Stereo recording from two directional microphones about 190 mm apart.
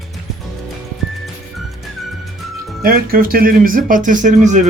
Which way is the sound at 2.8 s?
50° right (ahead or behind).